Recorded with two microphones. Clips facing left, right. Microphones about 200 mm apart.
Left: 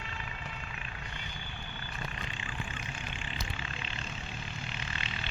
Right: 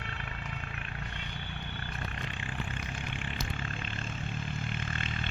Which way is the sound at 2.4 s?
55° right (ahead or behind).